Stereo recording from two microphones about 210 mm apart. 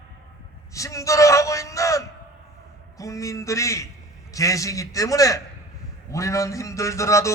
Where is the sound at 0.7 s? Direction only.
15° left (ahead or behind).